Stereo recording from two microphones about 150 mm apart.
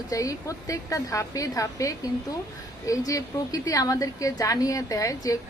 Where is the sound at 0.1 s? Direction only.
20° left (ahead or behind).